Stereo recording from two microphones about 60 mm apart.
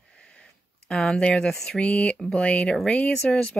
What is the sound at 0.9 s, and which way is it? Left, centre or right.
Speech, centre.